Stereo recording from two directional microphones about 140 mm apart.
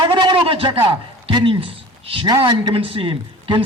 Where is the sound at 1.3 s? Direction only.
35° right (ahead or behind).